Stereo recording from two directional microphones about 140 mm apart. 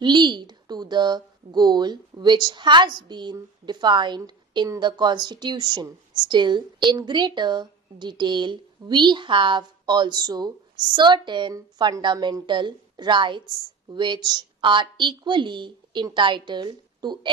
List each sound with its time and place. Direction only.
0.0 s a woman's voice: 35° right (ahead or behind)